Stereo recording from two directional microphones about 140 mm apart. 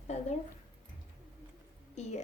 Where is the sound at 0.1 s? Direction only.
55° left (ahead or behind).